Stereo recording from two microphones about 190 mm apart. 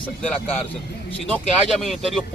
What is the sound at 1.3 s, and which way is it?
Speech, centre (ahead or behind).